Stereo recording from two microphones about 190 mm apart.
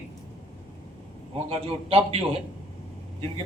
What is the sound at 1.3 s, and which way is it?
Speech, 30° right (ahead or behind).